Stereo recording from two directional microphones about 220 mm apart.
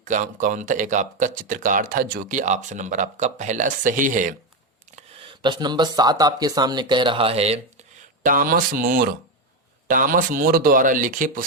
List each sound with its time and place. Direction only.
0.0 s speech: 35° right (ahead or behind)
4.9 s a sound: 20° right (ahead or behind)
6.0 s speech: 20° right (ahead or behind)
8.2 s speech: 40° right (ahead or behind)